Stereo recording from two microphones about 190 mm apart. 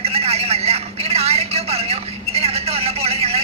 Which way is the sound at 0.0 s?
35° right (ahead or behind).